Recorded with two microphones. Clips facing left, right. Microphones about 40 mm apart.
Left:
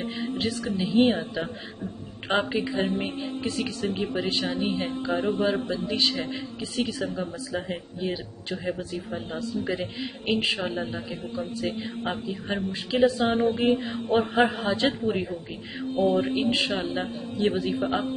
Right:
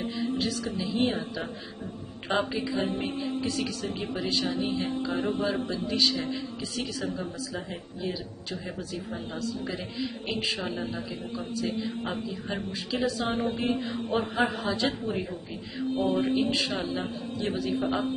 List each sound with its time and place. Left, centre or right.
0.4 s speech: left
14.2 s speech: left
15.0 s speech: left